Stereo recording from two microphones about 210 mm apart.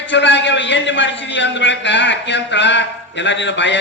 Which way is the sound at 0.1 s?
60° left (ahead or behind).